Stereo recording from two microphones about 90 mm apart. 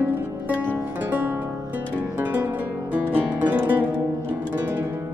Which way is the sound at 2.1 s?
20° right (ahead or behind).